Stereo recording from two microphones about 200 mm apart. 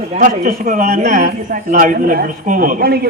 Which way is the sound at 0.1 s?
40° right (ahead or behind).